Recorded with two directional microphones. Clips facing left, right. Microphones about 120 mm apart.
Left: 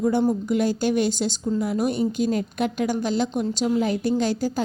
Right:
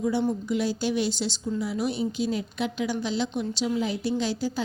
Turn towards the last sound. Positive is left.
turn(degrees=50)  # may be behind; listen again after turning